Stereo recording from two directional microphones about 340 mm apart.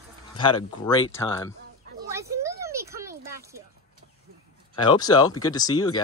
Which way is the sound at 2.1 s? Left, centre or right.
Centre.